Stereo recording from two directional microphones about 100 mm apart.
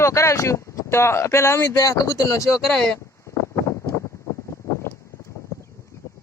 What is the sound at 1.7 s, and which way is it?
Speech, 35° left (ahead or behind).